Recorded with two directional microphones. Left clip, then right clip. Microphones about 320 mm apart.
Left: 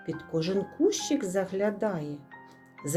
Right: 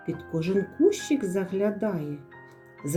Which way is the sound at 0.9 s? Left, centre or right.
Centre.